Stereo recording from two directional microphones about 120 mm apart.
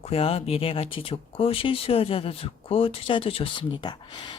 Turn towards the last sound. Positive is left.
turn(degrees=40)  # may be behind; listen again after turning